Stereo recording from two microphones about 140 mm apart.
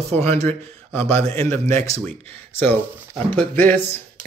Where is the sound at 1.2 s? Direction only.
45° right (ahead or behind).